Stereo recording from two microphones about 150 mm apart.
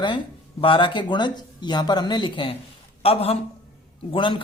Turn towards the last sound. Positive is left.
turn(degrees=35)  # may be behind; listen again after turning